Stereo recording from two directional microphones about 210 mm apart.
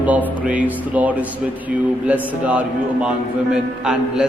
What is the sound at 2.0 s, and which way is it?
A man's voice, 5° right (ahead or behind).